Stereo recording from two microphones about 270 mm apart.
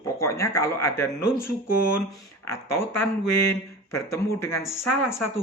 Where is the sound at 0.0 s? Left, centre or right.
Centre.